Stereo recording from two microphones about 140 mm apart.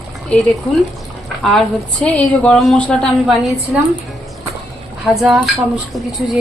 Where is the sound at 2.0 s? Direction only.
10° left (ahead or behind).